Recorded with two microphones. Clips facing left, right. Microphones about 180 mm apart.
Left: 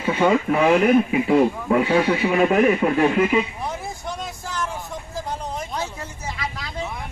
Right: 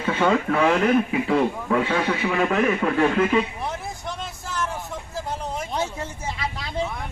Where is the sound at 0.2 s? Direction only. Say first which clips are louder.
Left 2 dB; 15° left (ahead or behind).